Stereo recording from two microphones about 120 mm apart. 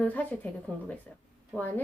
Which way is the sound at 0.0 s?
10° left (ahead or behind).